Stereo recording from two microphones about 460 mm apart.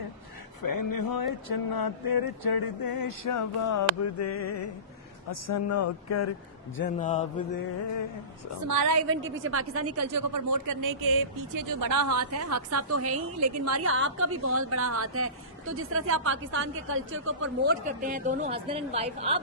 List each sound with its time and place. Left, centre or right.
0.6 s a sound: left
5.3 s speech: left
6.7 s speech: centre
8.6 s a woman's voice: right
9.0 s speech: right